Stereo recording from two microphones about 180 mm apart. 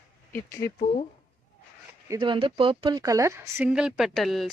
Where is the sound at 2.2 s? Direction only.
30° right (ahead or behind).